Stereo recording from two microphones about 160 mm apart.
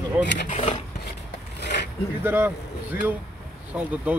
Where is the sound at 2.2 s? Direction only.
10° right (ahead or behind).